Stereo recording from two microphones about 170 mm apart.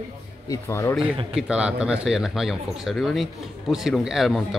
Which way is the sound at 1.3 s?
5° right (ahead or behind).